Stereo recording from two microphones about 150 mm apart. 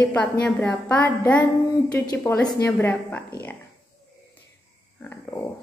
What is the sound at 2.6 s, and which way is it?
Speech, 10° left (ahead or behind).